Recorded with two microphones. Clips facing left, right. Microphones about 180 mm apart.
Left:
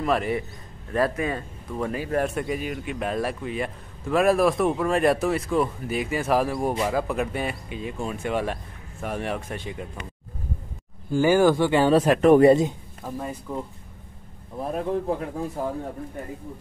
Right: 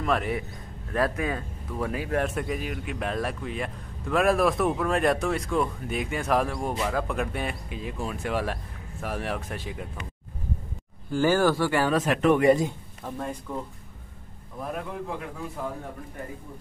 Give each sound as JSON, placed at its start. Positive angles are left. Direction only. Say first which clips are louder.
{"t": 0.0, "sound": "speech", "louder": "left 3 dB", "side_deg": 0}
{"t": 11.1, "sound": "speech", "louder": "left 4 dB", "side_deg": 15}
{"t": 12.0, "sound": "speech", "louder": "left 7 dB", "side_deg": 35}
{"t": 13.0, "sound": "speech", "louder": "left 1 dB", "side_deg": 5}
{"t": 14.6, "sound": "speech", "louder": "left 7 dB", "side_deg": 30}